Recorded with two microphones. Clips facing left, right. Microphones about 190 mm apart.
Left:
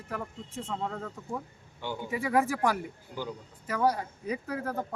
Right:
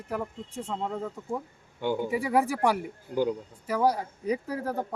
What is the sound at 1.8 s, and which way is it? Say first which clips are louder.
Speech: right 8 dB; 50° right (ahead or behind).